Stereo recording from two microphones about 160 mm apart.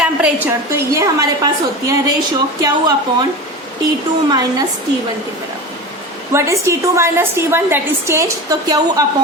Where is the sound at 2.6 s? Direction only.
25° right (ahead or behind).